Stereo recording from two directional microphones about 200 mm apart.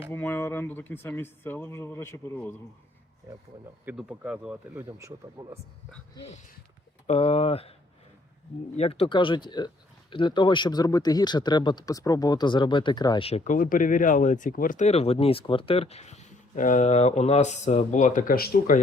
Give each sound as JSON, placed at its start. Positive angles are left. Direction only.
{"t": 0.1, "sound": "speech", "side_deg": 10}
{"t": 3.8, "sound": "speech", "side_deg": -5}
{"t": 6.1, "sound": "speech", "side_deg": 30}
{"t": 8.7, "sound": "speech", "side_deg": 30}